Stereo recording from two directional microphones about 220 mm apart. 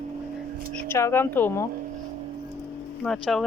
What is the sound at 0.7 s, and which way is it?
Speech, 10° left (ahead or behind).